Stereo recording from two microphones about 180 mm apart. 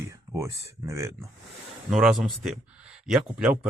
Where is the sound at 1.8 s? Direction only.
5° right (ahead or behind).